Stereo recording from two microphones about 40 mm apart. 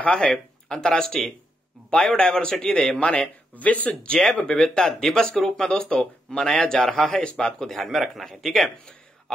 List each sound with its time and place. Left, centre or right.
0.0 s speech: left
0.3 s speech: centre
1.9 s speech: left
3.5 s speech: left
4.0 s speech: left
7.0 s speech: centre
7.2 s speech: centre